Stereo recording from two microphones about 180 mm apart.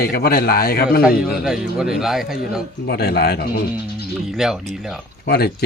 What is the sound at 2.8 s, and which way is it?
Speech, 65° left (ahead or behind).